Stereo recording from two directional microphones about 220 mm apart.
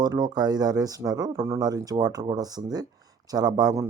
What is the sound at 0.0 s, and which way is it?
Speech, 20° right (ahead or behind).